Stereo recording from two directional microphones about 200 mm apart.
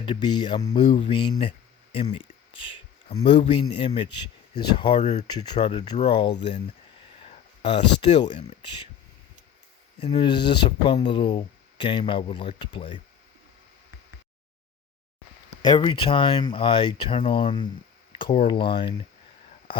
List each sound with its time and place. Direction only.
0.0 s speech: 25° left (ahead or behind)
5.5 s speech: 25° left (ahead or behind)
7.3 s speech: 25° left (ahead or behind)
10.0 s speech: 25° left (ahead or behind)
15.6 s speech: 25° left (ahead or behind)